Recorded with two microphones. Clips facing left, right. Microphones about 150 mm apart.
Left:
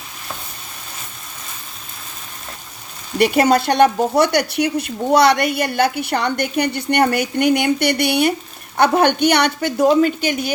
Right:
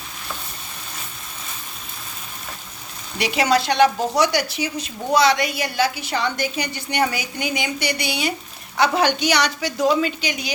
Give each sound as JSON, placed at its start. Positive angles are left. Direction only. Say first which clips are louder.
{"t": 3.2, "sound": "a woman's voice", "louder": "left 5 dB", "side_deg": 50}